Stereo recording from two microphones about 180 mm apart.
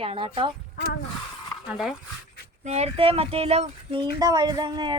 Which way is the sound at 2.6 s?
35° right (ahead or behind).